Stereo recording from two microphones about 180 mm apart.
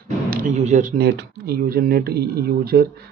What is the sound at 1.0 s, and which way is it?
Speech, 65° right (ahead or behind).